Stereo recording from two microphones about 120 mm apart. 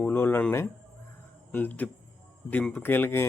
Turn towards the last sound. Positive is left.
turn(degrees=20)  # may be behind; listen again after turning